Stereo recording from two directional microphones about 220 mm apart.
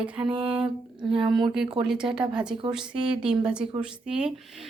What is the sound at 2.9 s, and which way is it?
Speech, 20° right (ahead or behind).